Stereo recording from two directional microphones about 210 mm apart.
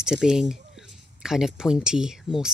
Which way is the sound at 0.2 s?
5° right (ahead or behind).